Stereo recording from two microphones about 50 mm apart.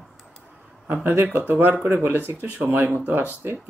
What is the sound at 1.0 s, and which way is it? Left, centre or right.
Speech, right.